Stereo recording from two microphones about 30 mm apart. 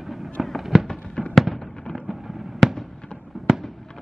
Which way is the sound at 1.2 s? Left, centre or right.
Left.